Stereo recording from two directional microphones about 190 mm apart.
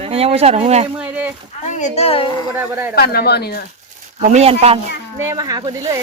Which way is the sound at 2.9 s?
55° left (ahead or behind).